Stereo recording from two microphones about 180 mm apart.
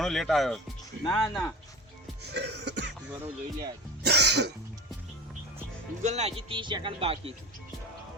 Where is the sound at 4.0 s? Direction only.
65° right (ahead or behind).